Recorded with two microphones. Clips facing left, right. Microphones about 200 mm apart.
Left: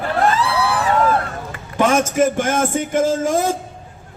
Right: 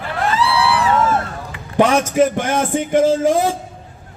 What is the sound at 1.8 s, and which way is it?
Music, 45° left (ahead or behind).